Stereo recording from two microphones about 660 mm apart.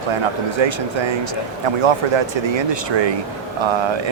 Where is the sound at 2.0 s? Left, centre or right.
Right.